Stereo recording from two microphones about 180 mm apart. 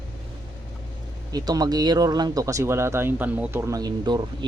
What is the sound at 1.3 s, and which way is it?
Speech, 20° right (ahead or behind).